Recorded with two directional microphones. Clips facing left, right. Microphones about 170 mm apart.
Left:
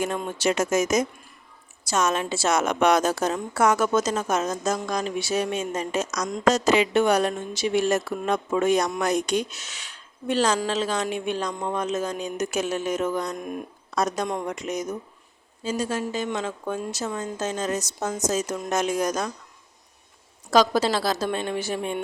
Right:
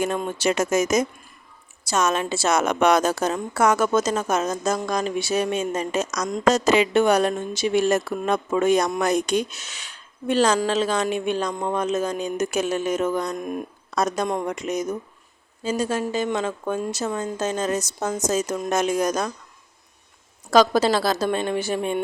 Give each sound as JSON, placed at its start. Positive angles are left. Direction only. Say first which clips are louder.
{"t": 0.3, "sound": "a woman's voice", "louder": "right 1 dB", "side_deg": -60}
{"t": 20.5, "sound": "a woman's voice", "louder": "right 3 dB", "side_deg": -55}